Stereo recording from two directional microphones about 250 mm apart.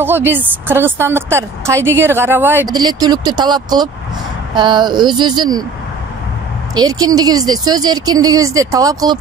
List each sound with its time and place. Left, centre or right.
0.0 s a woman's voice: centre
6.7 s a woman's voice: centre